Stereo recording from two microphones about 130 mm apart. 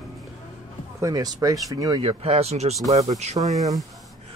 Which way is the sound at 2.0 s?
50° right (ahead or behind).